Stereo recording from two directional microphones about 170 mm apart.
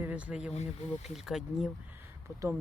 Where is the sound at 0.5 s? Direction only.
40° left (ahead or behind).